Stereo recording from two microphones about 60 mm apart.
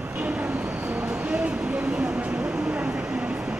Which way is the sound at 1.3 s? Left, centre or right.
Centre.